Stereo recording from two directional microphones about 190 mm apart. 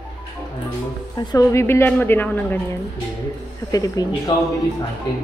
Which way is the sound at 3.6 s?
20° left (ahead or behind).